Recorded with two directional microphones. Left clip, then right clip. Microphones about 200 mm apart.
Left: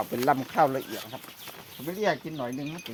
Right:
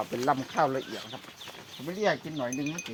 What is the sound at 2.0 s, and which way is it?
Speech, 45° left (ahead or behind).